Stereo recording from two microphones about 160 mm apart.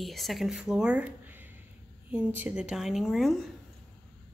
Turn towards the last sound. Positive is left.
turn(degrees=0)  # may be behind; listen again after turning